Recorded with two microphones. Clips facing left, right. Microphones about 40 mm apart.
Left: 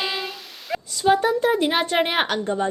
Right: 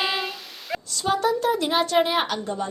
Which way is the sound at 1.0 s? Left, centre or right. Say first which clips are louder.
Left 4 dB; left.